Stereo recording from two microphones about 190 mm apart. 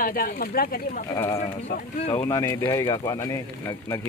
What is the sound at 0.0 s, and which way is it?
Speech, 50° left (ahead or behind).